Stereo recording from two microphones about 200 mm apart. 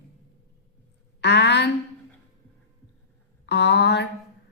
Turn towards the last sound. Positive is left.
turn(degrees=60)  # may be behind; listen again after turning